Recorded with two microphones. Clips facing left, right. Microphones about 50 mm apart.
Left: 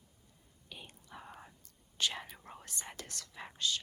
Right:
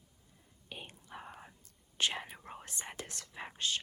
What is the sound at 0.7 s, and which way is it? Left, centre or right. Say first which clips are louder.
Whispering: right 3 dB; right.